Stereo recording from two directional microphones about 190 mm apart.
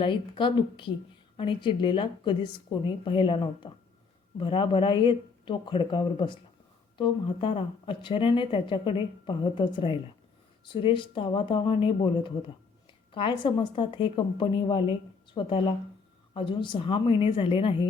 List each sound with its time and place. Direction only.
0.0 s speech: 25° left (ahead or behind)